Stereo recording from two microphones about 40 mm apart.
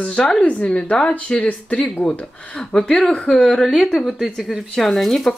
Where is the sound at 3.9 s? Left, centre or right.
Centre.